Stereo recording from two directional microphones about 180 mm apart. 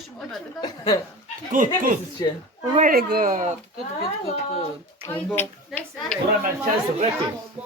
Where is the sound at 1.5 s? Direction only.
50° right (ahead or behind).